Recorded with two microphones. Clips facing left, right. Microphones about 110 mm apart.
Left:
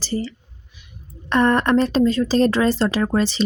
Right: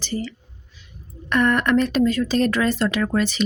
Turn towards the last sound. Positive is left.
turn(degrees=30)  # may be behind; listen again after turning